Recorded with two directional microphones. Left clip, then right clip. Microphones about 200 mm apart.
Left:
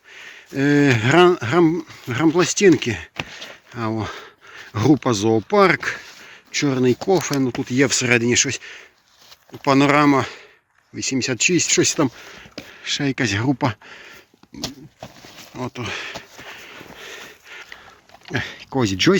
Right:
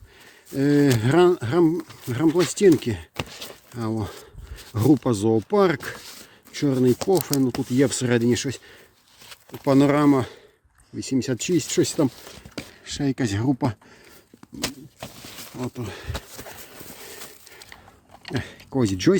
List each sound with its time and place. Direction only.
0.1 s speech: 10° right (ahead or behind)
3.2 s a sound: 80° right
3.8 s speech: 10° right (ahead or behind)
15.5 s speech: 15° right (ahead or behind)
17.5 s a sound: 5° right (ahead or behind)
18.3 s speech: 5° right (ahead or behind)